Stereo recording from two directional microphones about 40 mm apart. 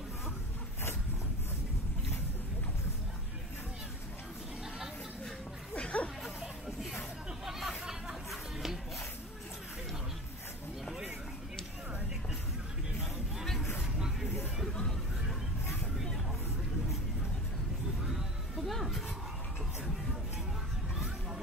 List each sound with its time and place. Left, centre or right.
5.8 s a sound: left
6.4 s music: centre
7.4 s chatter: centre
13.4 s hubbub: centre
14.7 s hubbub: centre
18.6 s music: centre